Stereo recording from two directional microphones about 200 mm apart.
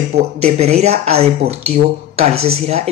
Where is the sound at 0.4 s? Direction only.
30° right (ahead or behind).